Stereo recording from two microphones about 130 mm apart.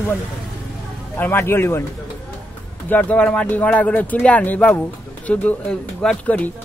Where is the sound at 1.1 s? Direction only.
15° left (ahead or behind).